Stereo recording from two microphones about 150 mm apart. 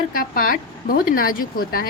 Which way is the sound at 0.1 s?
70° left (ahead or behind).